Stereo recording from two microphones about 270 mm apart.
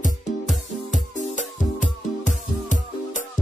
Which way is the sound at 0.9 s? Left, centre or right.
Left.